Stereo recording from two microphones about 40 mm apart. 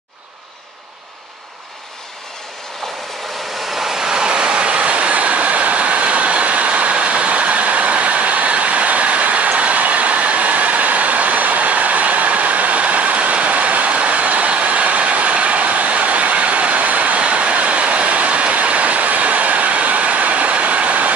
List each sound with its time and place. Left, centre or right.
3.7 s vehicle: centre
4.1 s train: right